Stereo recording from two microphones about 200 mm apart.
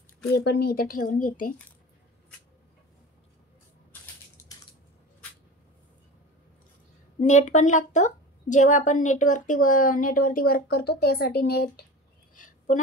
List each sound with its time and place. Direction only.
0.3 s a woman's voice: 55° left (ahead or behind)
7.2 s a woman's voice: 35° left (ahead or behind); by 11.8 s 50° left (ahead or behind)
12.7 s a woman's voice: 40° left (ahead or behind)